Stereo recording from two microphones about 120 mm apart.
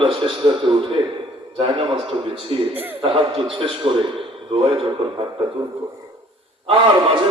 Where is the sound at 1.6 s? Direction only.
50° right (ahead or behind).